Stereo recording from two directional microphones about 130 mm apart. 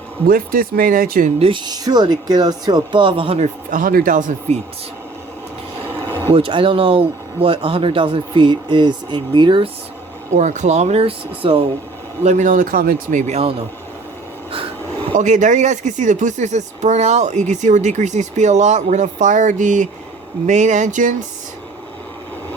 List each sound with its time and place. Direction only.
0.3 s speech: 90° right
1.4 s speech: 40° right (ahead or behind)
3.7 s speech: 90° right; by 4.6 s 60° right (ahead or behind)
5.8 s a sound: 15° right (ahead or behind)
6.3 s speech: 45° right (ahead or behind)
10.3 s speech: 65° right (ahead or behind); by 11.6 s 45° right (ahead or behind)
12.2 s speech: 65° right (ahead or behind)
15.1 s speech: 70° right (ahead or behind)